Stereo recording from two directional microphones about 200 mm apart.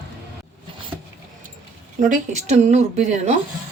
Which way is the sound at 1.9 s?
35° right (ahead or behind).